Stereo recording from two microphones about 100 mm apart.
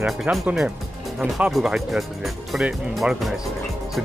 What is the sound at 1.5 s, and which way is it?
Speech, 5° right (ahead or behind).